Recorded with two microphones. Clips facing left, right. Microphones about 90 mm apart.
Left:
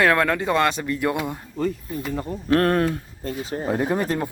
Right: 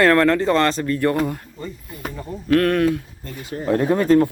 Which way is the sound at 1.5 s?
75° left (ahead or behind).